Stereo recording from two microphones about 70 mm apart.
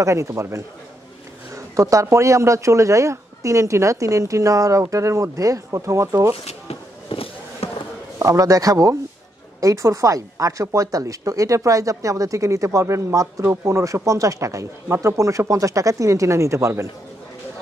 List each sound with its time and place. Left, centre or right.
0.0 s speech: right
8.2 s a man's voice: right